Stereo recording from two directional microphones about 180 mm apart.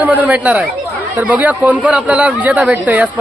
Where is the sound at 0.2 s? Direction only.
10° right (ahead or behind).